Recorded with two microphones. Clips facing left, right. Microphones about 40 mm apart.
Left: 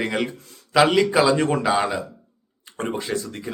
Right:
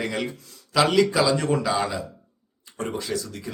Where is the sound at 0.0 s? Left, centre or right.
Left.